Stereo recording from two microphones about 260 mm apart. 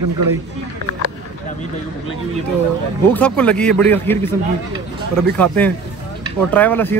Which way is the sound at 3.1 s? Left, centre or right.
Centre.